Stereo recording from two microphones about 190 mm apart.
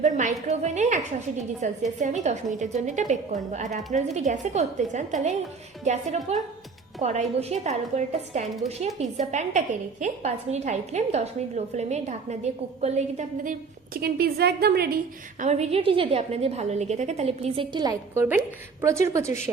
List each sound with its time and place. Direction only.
0.0 s a woman's voice: 40° right (ahead or behind); by 14.9 s 55° right (ahead or behind)
15.4 s a woman's voice: 35° right (ahead or behind); by 19.4 s 15° right (ahead or behind)